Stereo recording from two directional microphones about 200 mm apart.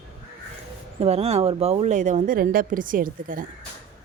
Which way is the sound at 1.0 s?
30° right (ahead or behind).